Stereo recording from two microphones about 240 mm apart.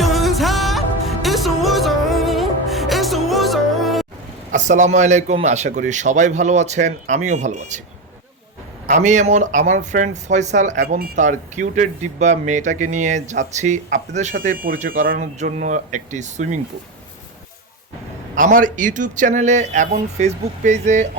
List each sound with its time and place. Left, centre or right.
0.0 s music: centre
4.5 s a man's voice: right
8.9 s speech: right
18.3 s speech: right